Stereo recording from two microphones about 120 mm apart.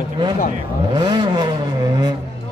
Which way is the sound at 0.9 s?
40° right (ahead or behind).